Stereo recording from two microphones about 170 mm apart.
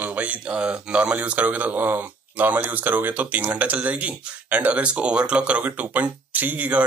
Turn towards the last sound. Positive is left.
turn(degrees=-10)  # may be behind; listen again after turning